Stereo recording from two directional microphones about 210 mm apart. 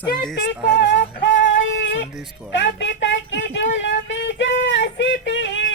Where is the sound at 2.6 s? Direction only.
60° left (ahead or behind).